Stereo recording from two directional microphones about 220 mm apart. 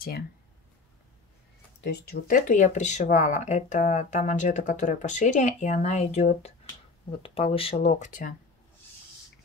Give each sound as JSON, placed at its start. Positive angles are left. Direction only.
{"t": 1.8, "sound": "speech", "side_deg": 45}